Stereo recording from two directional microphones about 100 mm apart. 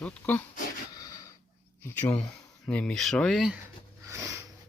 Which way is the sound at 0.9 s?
35° left (ahead or behind).